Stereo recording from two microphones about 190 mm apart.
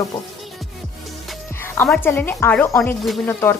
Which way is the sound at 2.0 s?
10° left (ahead or behind).